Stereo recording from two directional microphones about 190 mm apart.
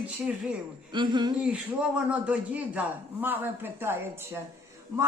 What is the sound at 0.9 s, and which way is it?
Speech, 25° right (ahead or behind).